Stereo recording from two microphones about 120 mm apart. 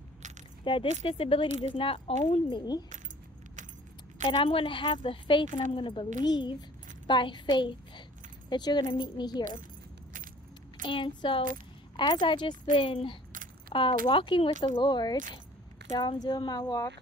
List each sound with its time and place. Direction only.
0.7 s speech: 45° left (ahead or behind)
2.5 s speech: 35° left (ahead or behind)
4.3 s a woman's voice: 45° left (ahead or behind)
10.8 s speech: 40° left (ahead or behind)
15.9 s speech: 50° left (ahead or behind)
16.2 s speech: 35° left (ahead or behind)